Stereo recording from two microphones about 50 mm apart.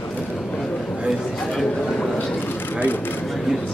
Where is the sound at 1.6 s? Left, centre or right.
Centre.